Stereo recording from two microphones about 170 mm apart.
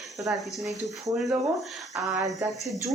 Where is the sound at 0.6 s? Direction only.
Centre (ahead or behind).